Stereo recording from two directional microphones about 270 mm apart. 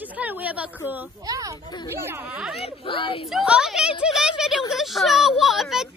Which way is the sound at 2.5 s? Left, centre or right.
Left.